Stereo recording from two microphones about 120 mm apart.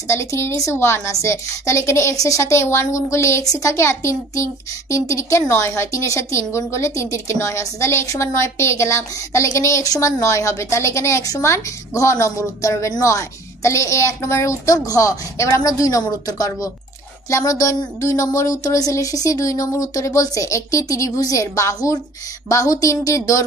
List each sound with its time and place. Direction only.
0.1 s a woman's voice: 20° left (ahead or behind)